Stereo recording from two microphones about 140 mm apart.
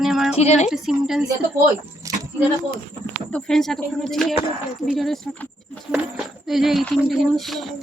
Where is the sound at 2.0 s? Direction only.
25° right (ahead or behind).